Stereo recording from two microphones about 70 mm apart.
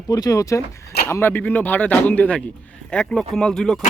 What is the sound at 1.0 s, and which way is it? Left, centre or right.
Speech, left.